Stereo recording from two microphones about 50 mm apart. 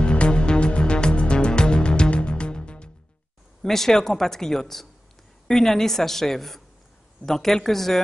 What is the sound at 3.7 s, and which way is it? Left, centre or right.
A woman's voice, centre.